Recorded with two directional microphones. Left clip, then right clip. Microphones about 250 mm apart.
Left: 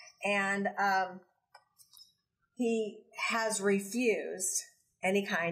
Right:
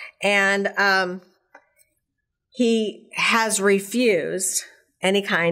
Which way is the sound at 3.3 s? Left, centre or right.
Right.